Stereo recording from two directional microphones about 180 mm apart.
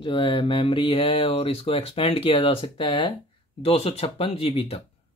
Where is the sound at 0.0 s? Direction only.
30° left (ahead or behind).